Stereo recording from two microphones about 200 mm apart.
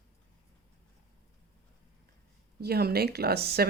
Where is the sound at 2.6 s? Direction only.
50° right (ahead or behind).